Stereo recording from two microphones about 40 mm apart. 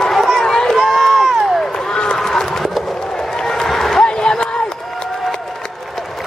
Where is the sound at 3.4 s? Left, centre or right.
Centre.